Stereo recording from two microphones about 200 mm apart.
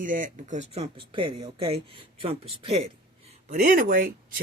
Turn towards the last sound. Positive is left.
turn(degrees=-45)  # may be behind; listen again after turning